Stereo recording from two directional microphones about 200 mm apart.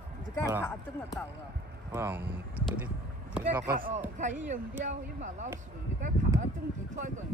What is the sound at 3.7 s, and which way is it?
A man's voice, 45° right (ahead or behind).